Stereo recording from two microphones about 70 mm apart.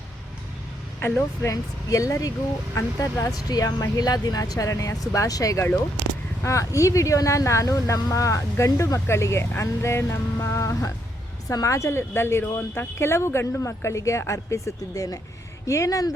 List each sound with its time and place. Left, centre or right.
1.4 s speech: left
6.4 s speech: left